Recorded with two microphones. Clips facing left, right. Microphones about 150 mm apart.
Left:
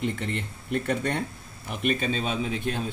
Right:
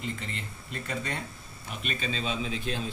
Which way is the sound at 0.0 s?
60° left (ahead or behind).